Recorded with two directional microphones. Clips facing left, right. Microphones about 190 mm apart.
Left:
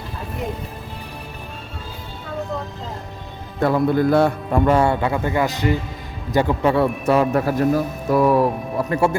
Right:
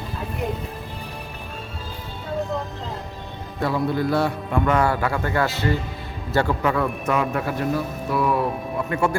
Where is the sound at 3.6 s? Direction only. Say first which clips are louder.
Left 5 dB; 50° left (ahead or behind).